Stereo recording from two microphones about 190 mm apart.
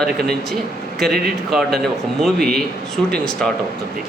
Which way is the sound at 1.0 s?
Centre (ahead or behind).